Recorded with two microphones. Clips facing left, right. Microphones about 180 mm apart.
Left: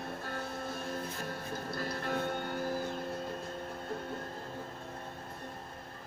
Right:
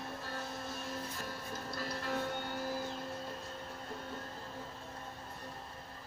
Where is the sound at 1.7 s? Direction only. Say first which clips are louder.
Left 2 dB; 55° left (ahead or behind).